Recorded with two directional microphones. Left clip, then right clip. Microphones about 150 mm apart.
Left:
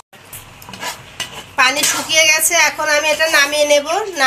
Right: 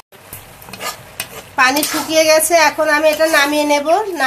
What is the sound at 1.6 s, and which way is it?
Speech, 90° right.